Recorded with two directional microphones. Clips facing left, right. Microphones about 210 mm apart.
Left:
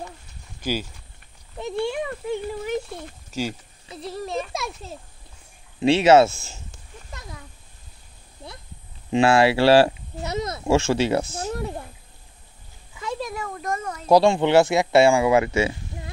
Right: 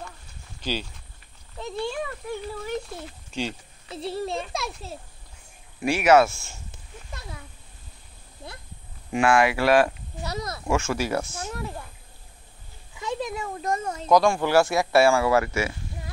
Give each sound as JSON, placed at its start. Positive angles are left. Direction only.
{"t": 1.9, "sound": "a sound", "side_deg": 15}
{"t": 2.9, "sound": "speech", "side_deg": 0}
{"t": 3.9, "sound": "a child's voice", "side_deg": -30}
{"t": 4.5, "sound": "a child's voice", "side_deg": 0}
{"t": 5.8, "sound": "speech", "side_deg": 25}
{"t": 9.1, "sound": "speech", "side_deg": 25}
{"t": 13.0, "sound": "a child's voice", "side_deg": -20}
{"t": 14.1, "sound": "speech", "side_deg": 25}